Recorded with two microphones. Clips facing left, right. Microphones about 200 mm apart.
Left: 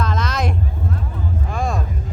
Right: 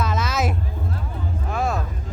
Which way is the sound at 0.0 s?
5° right (ahead or behind).